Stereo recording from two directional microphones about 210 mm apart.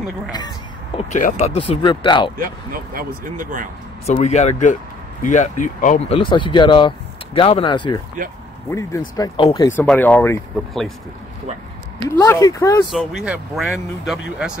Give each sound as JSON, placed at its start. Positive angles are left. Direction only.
{"t": 0.9, "sound": "speech", "side_deg": 35}
{"t": 2.3, "sound": "speech", "side_deg": -45}
{"t": 4.0, "sound": "speech", "side_deg": 35}
{"t": 12.1, "sound": "speech", "side_deg": 15}
{"t": 12.9, "sound": "speech", "side_deg": 0}